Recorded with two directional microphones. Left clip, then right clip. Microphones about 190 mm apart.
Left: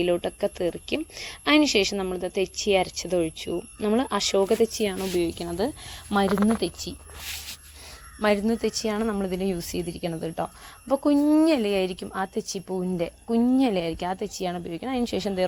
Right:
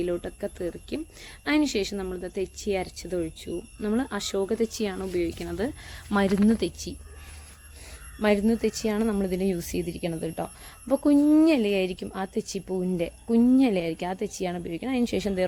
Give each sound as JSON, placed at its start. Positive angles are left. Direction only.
{"t": 0.0, "sound": "speech", "side_deg": 5}
{"t": 5.1, "sound": "speech", "side_deg": 20}
{"t": 5.5, "sound": "speech", "side_deg": 10}
{"t": 6.1, "sound": "speech", "side_deg": 0}
{"t": 8.2, "sound": "speech", "side_deg": -5}
{"t": 12.6, "sound": "speech", "side_deg": 10}
{"t": 13.0, "sound": "speech", "side_deg": -5}